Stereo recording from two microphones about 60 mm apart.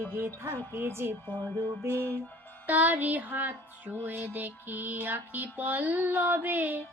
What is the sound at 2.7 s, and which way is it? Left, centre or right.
Music, right.